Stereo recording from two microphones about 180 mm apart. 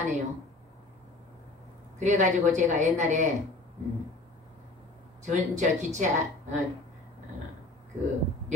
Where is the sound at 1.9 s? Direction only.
40° right (ahead or behind).